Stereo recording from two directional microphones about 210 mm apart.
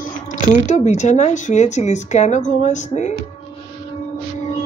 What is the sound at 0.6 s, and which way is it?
Speech, 35° left (ahead or behind).